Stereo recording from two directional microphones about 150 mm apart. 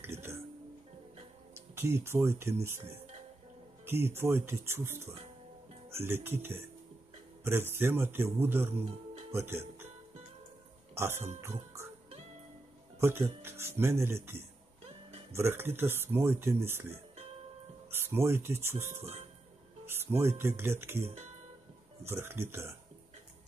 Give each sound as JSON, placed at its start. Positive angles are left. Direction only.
{"t": 0.0, "sound": "music", "side_deg": -15}
{"t": 1.5, "sound": "speech", "side_deg": -15}
{"t": 11.4, "sound": "music", "side_deg": -20}
{"t": 13.0, "sound": "speech", "side_deg": -15}
{"t": 17.9, "sound": "speech", "side_deg": -15}
{"t": 21.0, "sound": "speech", "side_deg": -45}
{"t": 22.0, "sound": "speech", "side_deg": -15}